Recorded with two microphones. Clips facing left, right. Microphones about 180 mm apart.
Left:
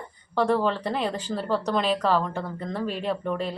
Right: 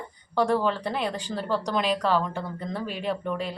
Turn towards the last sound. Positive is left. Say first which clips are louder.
# left 1 dB
turn(degrees=0)  # may be behind; listen again after turning